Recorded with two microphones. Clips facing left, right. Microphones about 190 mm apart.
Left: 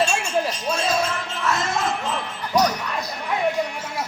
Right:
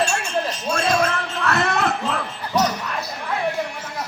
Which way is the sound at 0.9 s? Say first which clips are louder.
Right 3 dB; 65° right (ahead or behind).